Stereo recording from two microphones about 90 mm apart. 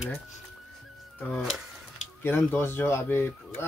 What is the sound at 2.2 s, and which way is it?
Speech, 25° left (ahead or behind).